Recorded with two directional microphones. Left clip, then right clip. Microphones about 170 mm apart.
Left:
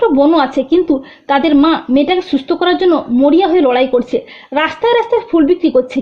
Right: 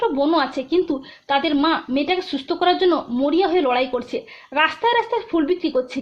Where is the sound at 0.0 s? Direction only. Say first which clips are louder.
Left 9 dB; 25° left (ahead or behind).